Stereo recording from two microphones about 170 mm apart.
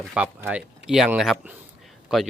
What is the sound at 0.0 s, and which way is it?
Speech, 5° right (ahead or behind).